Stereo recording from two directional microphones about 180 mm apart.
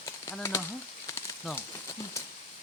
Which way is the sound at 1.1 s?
15° left (ahead or behind).